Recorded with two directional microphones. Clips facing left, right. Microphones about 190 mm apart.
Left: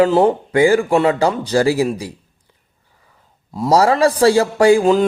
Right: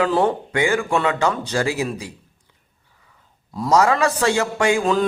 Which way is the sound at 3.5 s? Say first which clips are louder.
Left 3 dB; 30° left (ahead or behind).